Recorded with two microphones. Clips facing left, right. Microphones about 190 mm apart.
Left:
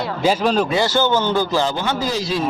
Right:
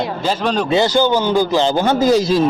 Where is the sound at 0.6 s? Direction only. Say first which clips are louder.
Right 4 dB; 20° right (ahead or behind).